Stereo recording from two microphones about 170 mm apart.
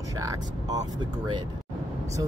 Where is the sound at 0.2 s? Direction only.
20° right (ahead or behind).